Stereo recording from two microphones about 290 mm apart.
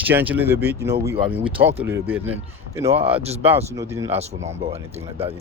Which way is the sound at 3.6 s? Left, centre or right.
Centre.